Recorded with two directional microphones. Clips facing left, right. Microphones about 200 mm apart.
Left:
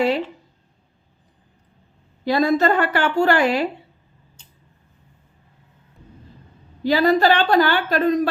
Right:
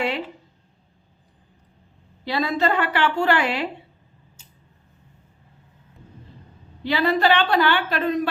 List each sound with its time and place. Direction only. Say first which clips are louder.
2.2 s a woman's voice: left 5 dB; 45° left (ahead or behind)
6.8 s a woman's voice: left 4 dB; 40° left (ahead or behind)